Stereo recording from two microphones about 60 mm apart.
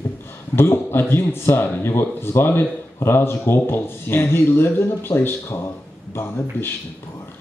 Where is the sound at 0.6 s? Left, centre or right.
Left.